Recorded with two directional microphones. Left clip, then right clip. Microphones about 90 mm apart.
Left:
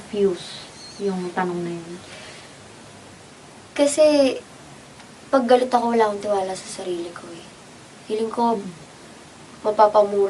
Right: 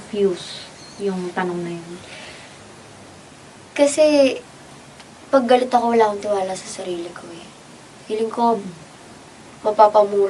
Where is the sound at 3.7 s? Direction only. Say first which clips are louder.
Right 2 dB; centre (ahead or behind).